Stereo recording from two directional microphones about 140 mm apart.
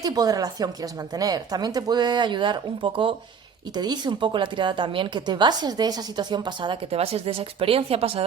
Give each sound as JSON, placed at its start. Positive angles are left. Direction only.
{"t": 0.0, "sound": "speech", "side_deg": -25}